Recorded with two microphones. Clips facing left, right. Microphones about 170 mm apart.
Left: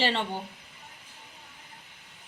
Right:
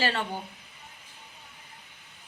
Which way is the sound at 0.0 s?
25° left (ahead or behind).